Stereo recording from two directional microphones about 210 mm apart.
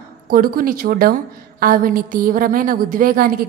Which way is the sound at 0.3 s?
45° right (ahead or behind).